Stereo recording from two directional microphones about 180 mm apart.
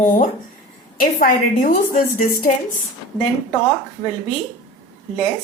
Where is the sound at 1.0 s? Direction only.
50° left (ahead or behind).